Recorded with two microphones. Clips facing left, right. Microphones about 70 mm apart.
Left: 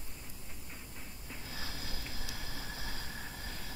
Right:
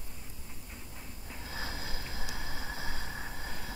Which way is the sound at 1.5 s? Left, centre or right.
Right.